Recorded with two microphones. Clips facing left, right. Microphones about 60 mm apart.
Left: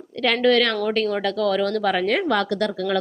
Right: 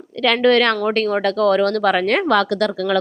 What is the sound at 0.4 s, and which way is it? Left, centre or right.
A woman's voice, right.